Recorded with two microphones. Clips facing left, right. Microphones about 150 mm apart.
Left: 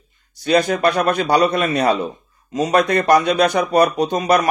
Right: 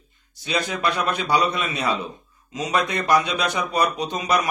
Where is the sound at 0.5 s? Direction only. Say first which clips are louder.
Left 9 dB; 50° left (ahead or behind).